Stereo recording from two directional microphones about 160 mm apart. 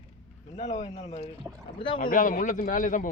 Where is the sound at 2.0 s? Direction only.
60° left (ahead or behind).